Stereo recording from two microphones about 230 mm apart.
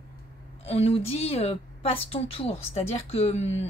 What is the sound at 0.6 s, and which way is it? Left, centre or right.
A woman's voice, left.